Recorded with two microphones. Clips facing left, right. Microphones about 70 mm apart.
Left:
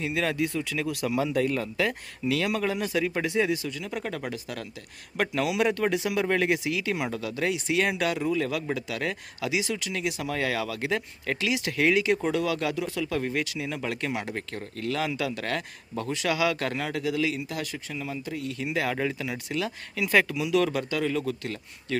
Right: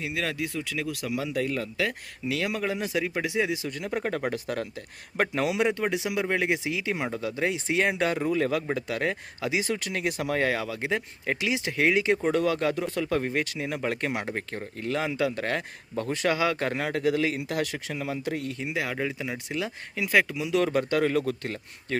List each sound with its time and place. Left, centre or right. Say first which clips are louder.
0.0 s speech: left 3 dB; centre
2.2 s speech: left 2 dB; centre
3.7 s speech: right 3 dB; right
5.5 s speech: left 1 dB; centre
6.7 s speech: left 1 dB; right
16.8 s speech: right 3 dB; right
17.4 s speech: right 4 dB; right
18.7 s speech: left 3 dB; centre
19.2 s speech: left 1 dB; right
20.1 s speech: even; centre
20.3 s speech: even; right